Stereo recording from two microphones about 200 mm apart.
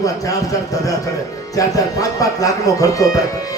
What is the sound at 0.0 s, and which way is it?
A man's voice, 15° left (ahead or behind).